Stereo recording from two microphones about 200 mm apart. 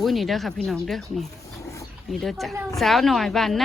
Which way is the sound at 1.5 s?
15° left (ahead or behind).